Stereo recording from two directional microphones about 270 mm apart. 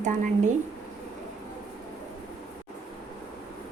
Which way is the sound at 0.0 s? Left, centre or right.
Right.